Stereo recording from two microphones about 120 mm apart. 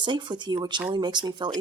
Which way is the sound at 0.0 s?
40° right (ahead or behind).